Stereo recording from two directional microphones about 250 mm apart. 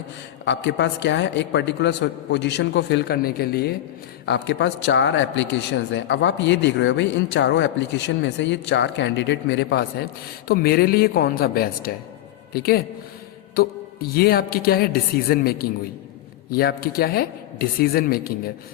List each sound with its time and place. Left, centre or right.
0.4 s a man's voice: left